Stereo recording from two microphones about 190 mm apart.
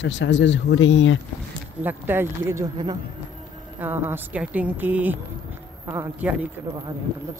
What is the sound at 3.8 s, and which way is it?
A woman's voice, 10° right (ahead or behind).